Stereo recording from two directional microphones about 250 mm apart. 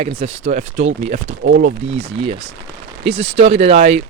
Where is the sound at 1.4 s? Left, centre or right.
Right.